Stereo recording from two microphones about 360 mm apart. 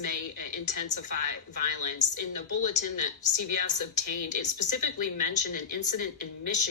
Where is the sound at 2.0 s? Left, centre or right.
Centre.